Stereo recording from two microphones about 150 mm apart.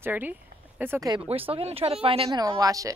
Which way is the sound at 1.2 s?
40° right (ahead or behind).